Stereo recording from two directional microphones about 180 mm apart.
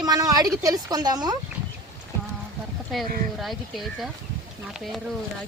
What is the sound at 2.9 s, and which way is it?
Speech, centre (ahead or behind).